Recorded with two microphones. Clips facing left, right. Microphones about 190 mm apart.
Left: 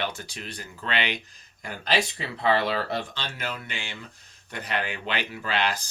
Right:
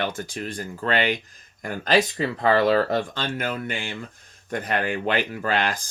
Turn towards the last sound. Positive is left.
turn(degrees=-50)  # may be behind; listen again after turning